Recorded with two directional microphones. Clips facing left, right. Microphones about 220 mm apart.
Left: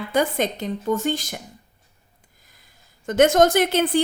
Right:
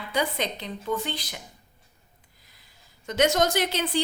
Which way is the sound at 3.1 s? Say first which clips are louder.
Left 7 dB; 50° left (ahead or behind).